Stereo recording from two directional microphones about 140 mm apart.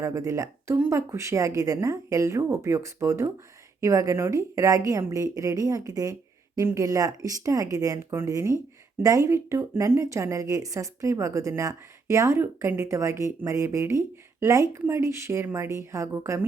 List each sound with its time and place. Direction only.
0.0 s a woman's voice: 20° right (ahead or behind)